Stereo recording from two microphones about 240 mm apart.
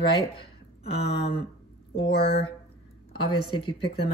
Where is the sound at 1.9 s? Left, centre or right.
Left.